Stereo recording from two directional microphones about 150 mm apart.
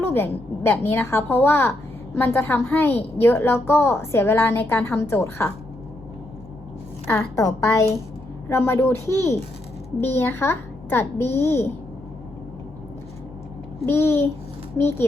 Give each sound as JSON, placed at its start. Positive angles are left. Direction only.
{"t": 0.1, "sound": "a woman's voice", "side_deg": 15}
{"t": 7.1, "sound": "a woman's voice", "side_deg": 20}
{"t": 13.8, "sound": "a woman's voice", "side_deg": 15}